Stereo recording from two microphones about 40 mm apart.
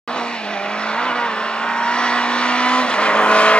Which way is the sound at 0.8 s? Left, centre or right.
Left.